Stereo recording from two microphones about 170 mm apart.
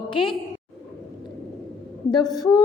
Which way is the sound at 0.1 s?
30° left (ahead or behind).